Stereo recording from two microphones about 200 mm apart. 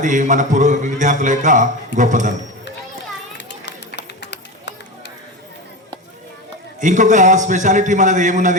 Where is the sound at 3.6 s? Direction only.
60° left (ahead or behind).